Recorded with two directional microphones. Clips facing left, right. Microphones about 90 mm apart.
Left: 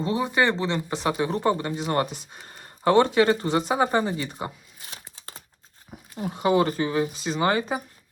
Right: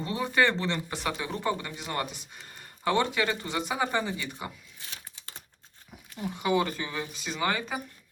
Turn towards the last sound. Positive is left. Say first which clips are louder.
# left 6 dB
turn(degrees=35)  # may be behind; listen again after turning